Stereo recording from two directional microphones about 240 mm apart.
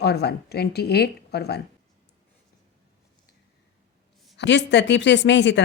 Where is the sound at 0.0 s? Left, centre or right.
Left.